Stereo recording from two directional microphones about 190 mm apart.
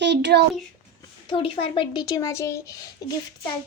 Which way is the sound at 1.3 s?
30° left (ahead or behind).